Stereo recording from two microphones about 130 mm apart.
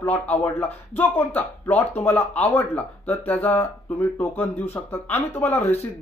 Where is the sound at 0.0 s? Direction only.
15° left (ahead or behind).